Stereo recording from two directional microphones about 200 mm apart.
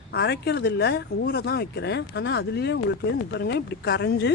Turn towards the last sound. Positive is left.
turn(degrees=60)  # may be behind; listen again after turning